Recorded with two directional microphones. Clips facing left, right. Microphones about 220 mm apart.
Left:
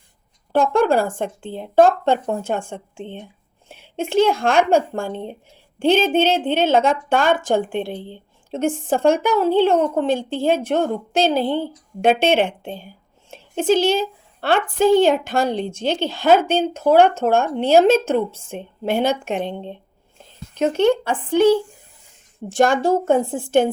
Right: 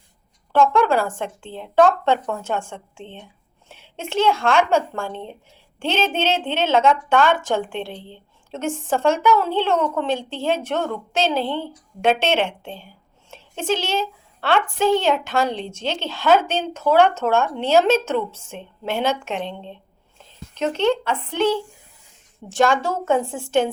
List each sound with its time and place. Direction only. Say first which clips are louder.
0.7 s speech: left 2 dB; 50° left (ahead or behind)
5.1 s speech: left 4 dB; 10° left (ahead or behind)
5.8 s a woman's voice: left 6 dB; 55° left (ahead or behind)